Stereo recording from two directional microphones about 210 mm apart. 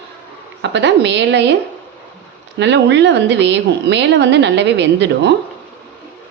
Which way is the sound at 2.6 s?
55° right (ahead or behind).